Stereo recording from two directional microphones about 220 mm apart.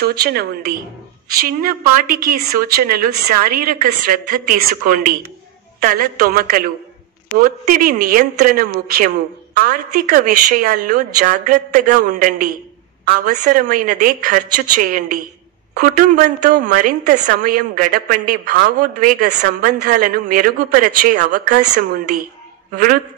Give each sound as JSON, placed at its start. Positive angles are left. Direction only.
{"t": 0.0, "sound": "a woman's voice", "side_deg": -45}
{"t": 3.5, "sound": "a woman's voice", "side_deg": -40}